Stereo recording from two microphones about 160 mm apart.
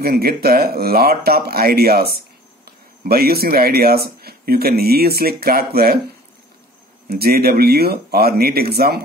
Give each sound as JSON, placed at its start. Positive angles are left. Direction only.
{"t": 0.0, "sound": "speech", "side_deg": -70}
{"t": 7.1, "sound": "speech", "side_deg": -75}